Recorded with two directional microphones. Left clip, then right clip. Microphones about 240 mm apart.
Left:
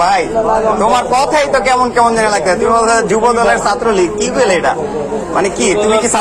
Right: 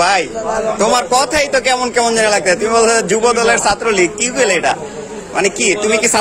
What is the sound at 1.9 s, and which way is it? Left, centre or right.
A man's voice, right.